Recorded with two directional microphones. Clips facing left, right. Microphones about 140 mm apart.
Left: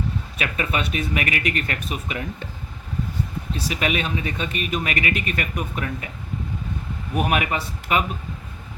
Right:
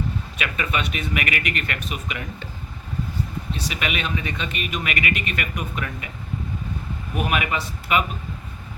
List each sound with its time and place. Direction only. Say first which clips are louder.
0.3 s speech: left 1 dB; 35° left (ahead or behind)
3.7 s speech: left 4 dB; 35° left (ahead or behind)
7.3 s speech: right 1 dB; 45° left (ahead or behind)